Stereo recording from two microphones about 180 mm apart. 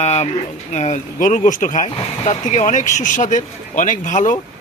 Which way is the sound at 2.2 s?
35° left (ahead or behind).